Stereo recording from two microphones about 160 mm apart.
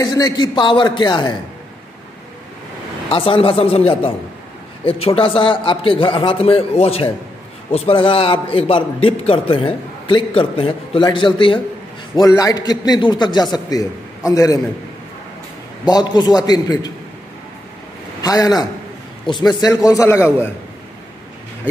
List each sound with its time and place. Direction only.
0.0 s a man's voice: 25° left (ahead or behind)
3.1 s a man's voice: 35° left (ahead or behind)
15.8 s a man's voice: 25° left (ahead or behind)
18.2 s a man's voice: 25° left (ahead or behind)